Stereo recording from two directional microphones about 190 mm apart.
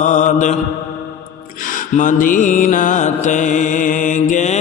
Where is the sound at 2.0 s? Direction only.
45° left (ahead or behind).